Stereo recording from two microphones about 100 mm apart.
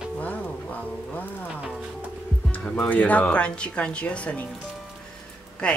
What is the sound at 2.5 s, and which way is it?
Speech, 10° left (ahead or behind).